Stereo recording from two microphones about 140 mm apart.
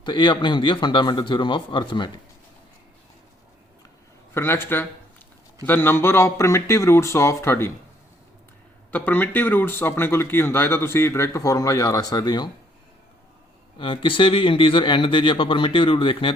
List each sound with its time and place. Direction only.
0.0 s speech: 30° left (ahead or behind)
4.4 s speech: 15° left (ahead or behind)
8.9 s speech: 10° left (ahead or behind); by 12.5 s 30° left (ahead or behind)
13.7 s speech: 35° left (ahead or behind)